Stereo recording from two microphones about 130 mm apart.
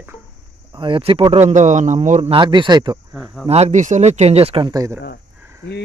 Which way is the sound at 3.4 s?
55° right (ahead or behind).